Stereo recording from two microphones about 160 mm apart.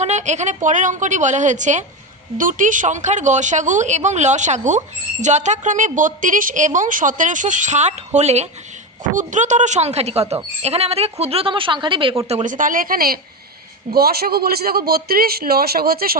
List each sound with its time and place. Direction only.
0.0 s a woman's voice: 45° right (ahead or behind)
12.3 s a man's voice: 50° right (ahead or behind); by 16.1 s 70° right (ahead or behind)